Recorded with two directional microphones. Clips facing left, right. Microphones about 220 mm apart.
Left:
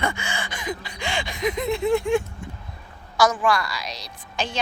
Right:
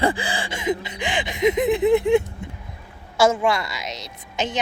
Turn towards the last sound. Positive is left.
turn(degrees=-20)  # may be behind; listen again after turning